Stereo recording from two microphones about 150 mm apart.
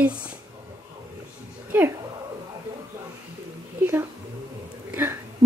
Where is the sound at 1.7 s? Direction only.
15° right (ahead or behind).